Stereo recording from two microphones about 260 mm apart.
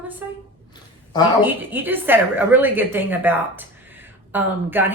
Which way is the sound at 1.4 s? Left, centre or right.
Centre.